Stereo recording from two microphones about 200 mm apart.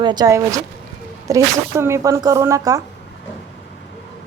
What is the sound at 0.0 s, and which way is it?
Speech, 20° right (ahead or behind).